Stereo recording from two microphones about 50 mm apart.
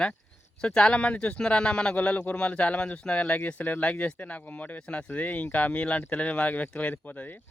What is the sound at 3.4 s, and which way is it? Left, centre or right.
Speech, left.